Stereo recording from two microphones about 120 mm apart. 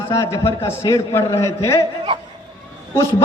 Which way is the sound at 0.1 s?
25° left (ahead or behind).